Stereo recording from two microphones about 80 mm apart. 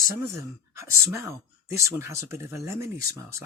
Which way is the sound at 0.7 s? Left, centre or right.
Right.